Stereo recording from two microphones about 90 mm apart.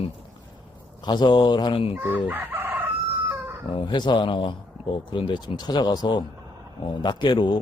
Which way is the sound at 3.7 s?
60° left (ahead or behind).